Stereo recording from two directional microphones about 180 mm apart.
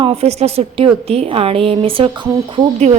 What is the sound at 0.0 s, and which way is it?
A woman's voice, 35° right (ahead or behind).